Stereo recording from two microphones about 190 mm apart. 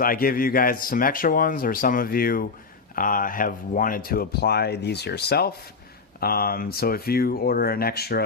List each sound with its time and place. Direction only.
0.0 s speech: 50° left (ahead or behind)